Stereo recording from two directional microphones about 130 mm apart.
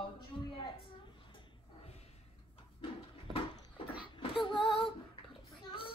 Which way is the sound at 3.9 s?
40° left (ahead or behind).